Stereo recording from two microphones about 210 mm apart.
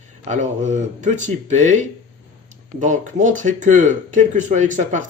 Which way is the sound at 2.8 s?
35° right (ahead or behind).